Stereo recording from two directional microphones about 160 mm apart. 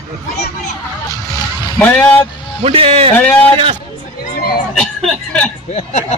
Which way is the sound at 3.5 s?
40° right (ahead or behind).